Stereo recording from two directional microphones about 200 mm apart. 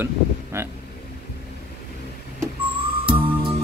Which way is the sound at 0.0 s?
10° right (ahead or behind).